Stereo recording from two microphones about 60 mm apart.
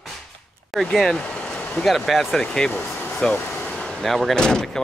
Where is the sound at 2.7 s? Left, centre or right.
Left.